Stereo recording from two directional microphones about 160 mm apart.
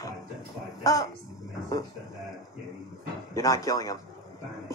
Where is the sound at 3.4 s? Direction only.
20° left (ahead or behind).